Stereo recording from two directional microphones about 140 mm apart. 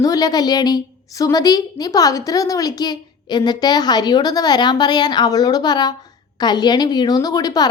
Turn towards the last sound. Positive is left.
turn(degrees=25)  # may be behind; listen again after turning